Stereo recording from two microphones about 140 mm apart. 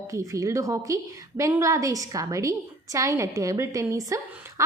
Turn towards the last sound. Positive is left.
turn(degrees=-20)  # may be behind; listen again after turning